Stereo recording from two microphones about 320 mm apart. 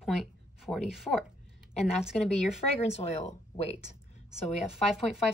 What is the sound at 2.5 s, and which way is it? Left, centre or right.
Speech, centre.